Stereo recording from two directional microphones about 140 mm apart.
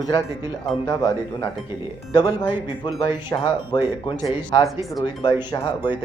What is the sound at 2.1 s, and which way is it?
Speech, 30° left (ahead or behind).